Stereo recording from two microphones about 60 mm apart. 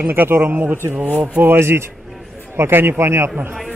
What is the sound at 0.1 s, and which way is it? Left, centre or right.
Speech, right.